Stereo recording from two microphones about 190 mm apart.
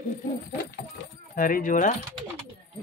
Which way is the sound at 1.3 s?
45° left (ahead or behind).